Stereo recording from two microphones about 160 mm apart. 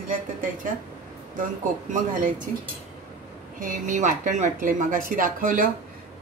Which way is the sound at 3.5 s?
55° right (ahead or behind).